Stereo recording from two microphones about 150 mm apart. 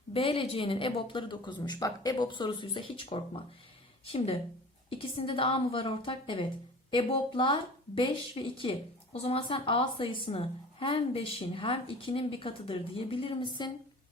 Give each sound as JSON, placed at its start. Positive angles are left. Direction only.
{"t": 0.1, "sound": "a woman's voice", "side_deg": 40}